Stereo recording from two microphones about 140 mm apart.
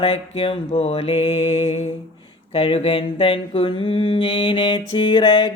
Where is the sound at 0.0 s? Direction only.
40° left (ahead or behind).